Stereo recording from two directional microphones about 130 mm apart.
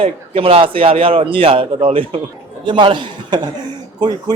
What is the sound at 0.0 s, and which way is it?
Speech, 45° right (ahead or behind).